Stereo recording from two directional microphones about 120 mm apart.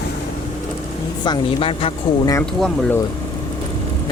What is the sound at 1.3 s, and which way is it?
Speech, 50° left (ahead or behind).